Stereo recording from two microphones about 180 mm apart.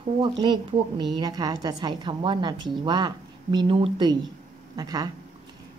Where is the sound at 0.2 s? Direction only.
25° right (ahead or behind).